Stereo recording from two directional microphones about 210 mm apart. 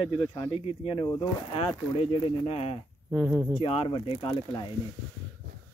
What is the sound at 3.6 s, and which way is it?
Speech, 25° left (ahead or behind).